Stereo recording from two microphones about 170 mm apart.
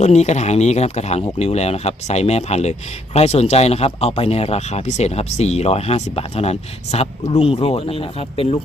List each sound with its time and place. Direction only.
0.0 s speech: 40° left (ahead or behind)